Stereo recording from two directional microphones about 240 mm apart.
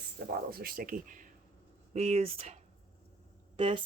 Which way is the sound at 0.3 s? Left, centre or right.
Right.